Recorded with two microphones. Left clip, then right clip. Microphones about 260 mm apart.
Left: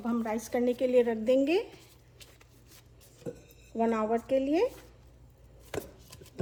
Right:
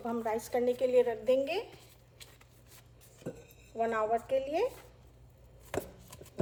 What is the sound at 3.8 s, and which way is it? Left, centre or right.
Speech, left.